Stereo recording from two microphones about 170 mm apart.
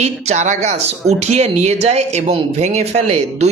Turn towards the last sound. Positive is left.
turn(degrees=-40)  # may be behind; listen again after turning